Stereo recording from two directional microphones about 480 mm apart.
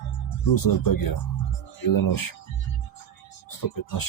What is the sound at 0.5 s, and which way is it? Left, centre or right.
Speech, left.